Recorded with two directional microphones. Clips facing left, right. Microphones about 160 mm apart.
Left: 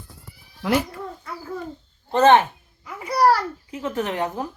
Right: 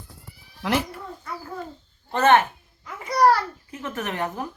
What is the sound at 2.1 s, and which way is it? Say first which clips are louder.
Speech: left 3 dB; 20° left (ahead or behind).